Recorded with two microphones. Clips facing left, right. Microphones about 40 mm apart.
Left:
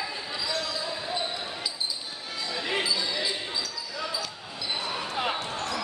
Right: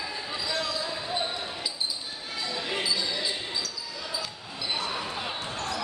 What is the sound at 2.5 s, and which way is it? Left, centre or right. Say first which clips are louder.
Basketball bounce: left 3 dB; centre.